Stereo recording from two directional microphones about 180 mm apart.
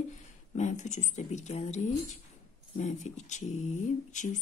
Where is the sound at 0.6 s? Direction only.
40° left (ahead or behind).